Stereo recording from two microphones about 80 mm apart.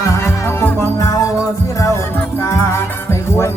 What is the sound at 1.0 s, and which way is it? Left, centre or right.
Music, left.